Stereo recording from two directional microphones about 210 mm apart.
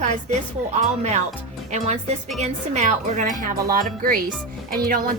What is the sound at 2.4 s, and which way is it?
A woman's voice, 35° right (ahead or behind).